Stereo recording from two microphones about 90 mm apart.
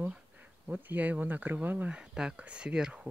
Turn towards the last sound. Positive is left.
turn(degrees=-10)  # may be behind; listen again after turning